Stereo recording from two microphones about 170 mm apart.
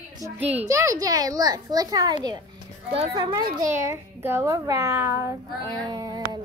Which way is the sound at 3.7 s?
15° right (ahead or behind).